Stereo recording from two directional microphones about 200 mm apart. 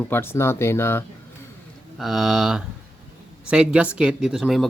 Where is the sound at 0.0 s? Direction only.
10° left (ahead or behind).